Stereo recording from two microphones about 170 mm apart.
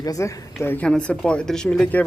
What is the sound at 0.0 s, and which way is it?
A woman's voice, 20° left (ahead or behind).